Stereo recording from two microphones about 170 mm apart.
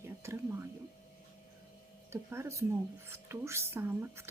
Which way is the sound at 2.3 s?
15° right (ahead or behind).